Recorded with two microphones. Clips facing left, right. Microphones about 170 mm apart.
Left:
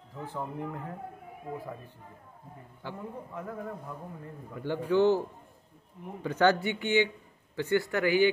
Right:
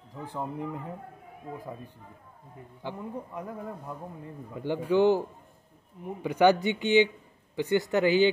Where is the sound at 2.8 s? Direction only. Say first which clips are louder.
Right 3 dB; 20° right (ahead or behind).